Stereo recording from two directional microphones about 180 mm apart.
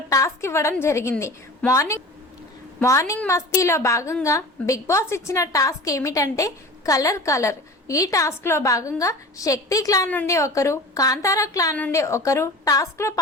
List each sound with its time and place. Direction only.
0.1 s a woman's voice: 15° left (ahead or behind)